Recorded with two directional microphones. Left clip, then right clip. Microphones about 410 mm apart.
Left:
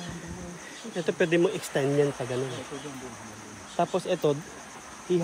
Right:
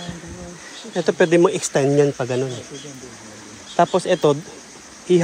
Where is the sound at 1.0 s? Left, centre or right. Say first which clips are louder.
Right 9 dB; centre.